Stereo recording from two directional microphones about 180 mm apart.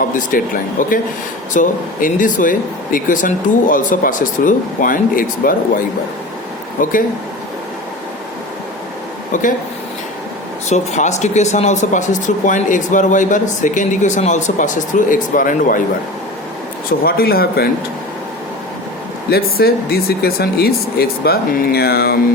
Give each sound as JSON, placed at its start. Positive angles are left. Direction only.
{"t": 0.1, "sound": "speech", "side_deg": 50}
{"t": 9.3, "sound": "speech", "side_deg": 45}
{"t": 10.7, "sound": "speech", "side_deg": 40}
{"t": 17.0, "sound": "speech", "side_deg": 55}
{"t": 19.3, "sound": "speech", "side_deg": 60}